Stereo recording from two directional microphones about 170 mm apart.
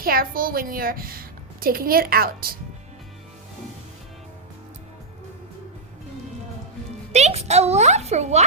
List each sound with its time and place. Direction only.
0.0 s a woman's voice: 60° right (ahead or behind)
7.1 s a child's voice: 40° right (ahead or behind)